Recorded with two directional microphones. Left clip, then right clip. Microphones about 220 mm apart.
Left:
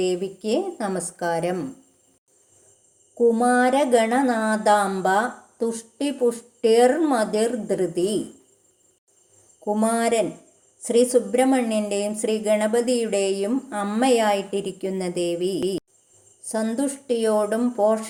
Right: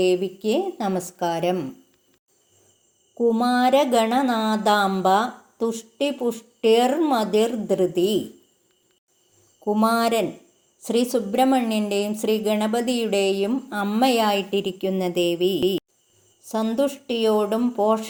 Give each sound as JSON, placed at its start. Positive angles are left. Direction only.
{"t": 0.0, "sound": "speech", "side_deg": -25}
{"t": 3.2, "sound": "speech", "side_deg": -20}
{"t": 9.6, "sound": "speech", "side_deg": -20}
{"t": 16.4, "sound": "a sound", "side_deg": -25}
{"t": 16.7, "sound": "speech", "side_deg": -20}